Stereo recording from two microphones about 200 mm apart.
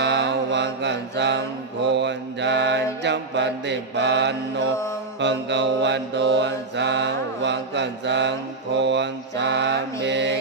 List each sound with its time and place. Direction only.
0.0 s mantra: 60° right (ahead or behind)